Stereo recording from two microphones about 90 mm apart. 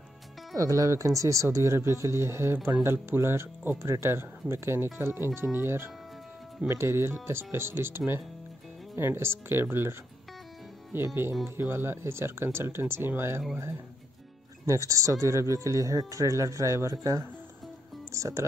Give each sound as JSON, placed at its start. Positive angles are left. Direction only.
{"t": 0.6, "sound": "speech", "side_deg": -40}
{"t": 14.7, "sound": "speech", "side_deg": -35}